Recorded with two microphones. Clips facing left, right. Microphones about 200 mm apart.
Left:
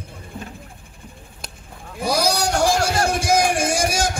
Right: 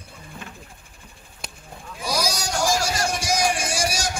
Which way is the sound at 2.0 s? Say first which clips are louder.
Left 6 dB; 60° left (ahead or behind).